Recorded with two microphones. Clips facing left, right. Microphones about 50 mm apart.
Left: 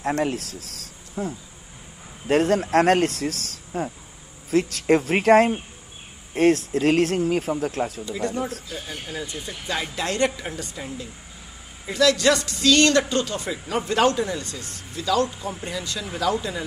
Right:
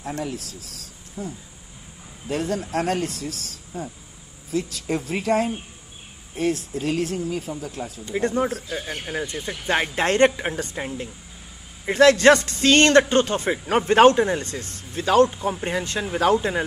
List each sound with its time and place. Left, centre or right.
0.0 s speech: left
8.0 s speech: right